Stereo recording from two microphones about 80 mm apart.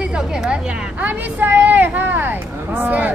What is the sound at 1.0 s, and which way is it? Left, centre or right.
Speech, right.